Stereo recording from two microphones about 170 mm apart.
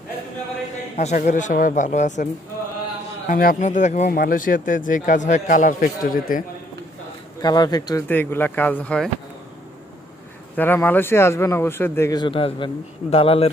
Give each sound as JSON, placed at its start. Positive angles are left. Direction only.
{"t": 0.9, "sound": "speech", "side_deg": 45}
{"t": 3.3, "sound": "speech", "side_deg": 55}
{"t": 7.4, "sound": "speech", "side_deg": 25}
{"t": 8.1, "sound": "speech", "side_deg": 10}
{"t": 10.5, "sound": "speech", "side_deg": 10}